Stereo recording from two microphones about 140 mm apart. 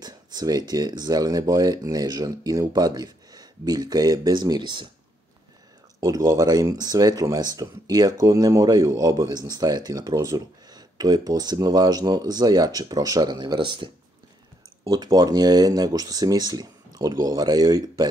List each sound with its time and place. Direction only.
0.0 s speech: 30° right (ahead or behind)
5.9 s speech: 25° right (ahead or behind)
14.9 s speech: 25° right (ahead or behind)